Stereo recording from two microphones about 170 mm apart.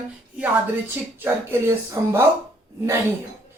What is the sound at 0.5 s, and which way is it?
Speech, 15° right (ahead or behind).